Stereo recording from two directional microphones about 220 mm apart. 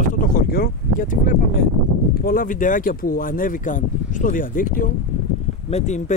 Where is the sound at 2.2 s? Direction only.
40° left (ahead or behind).